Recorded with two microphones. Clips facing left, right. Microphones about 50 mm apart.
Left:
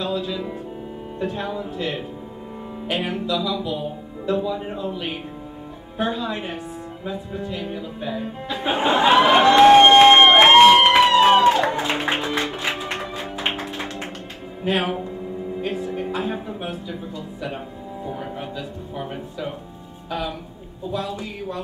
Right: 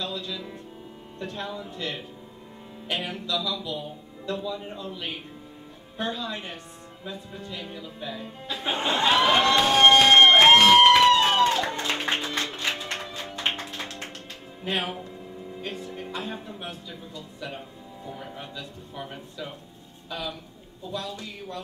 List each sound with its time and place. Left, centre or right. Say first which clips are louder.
0.0 s speech: left 8 dB; centre
9.6 s a sound: left 9 dB; left
10.8 s music: left 2 dB; centre
14.6 s speech: left 7 dB; centre
15.6 s music: left 8 dB; centre
18.0 s music: left 7 dB; centre
18.6 s speech: left 7 dB; centre